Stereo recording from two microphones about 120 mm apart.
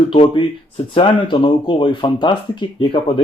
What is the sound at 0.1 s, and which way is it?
Speech, 45° left (ahead or behind).